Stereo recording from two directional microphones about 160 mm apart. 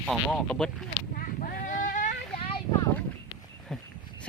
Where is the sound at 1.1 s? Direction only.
65° left (ahead or behind).